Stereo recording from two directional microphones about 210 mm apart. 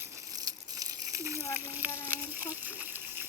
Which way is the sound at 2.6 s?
10° right (ahead or behind).